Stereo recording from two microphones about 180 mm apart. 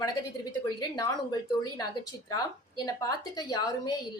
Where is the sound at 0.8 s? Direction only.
20° left (ahead or behind).